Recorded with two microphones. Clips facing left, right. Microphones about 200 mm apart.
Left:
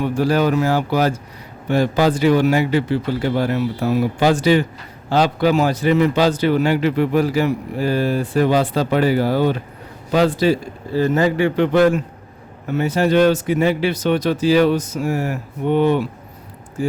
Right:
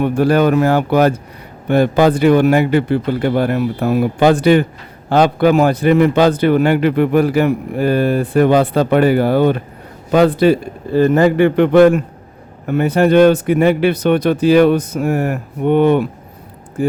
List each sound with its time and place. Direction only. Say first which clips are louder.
0.0 s a man's voice: right 4 dB; 55° right (ahead or behind)